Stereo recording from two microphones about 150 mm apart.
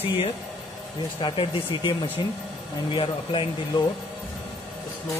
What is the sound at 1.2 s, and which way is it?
Speech, 35° left (ahead or behind).